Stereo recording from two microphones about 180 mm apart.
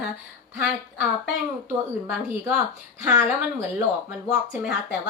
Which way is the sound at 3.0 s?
15° right (ahead or behind).